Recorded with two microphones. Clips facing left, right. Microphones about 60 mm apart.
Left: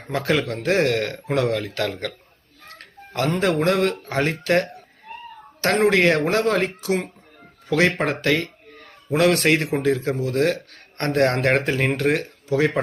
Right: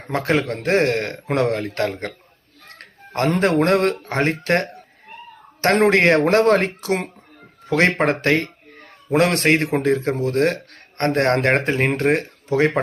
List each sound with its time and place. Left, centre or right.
0.0 s speech: right
2.7 s a sound: right
3.4 s speech: right
4.0 s speech: right
5.9 s speech: right